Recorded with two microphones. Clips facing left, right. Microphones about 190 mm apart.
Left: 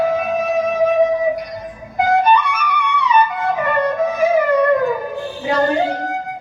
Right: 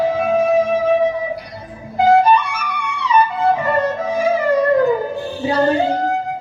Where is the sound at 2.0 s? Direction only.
30° right (ahead or behind).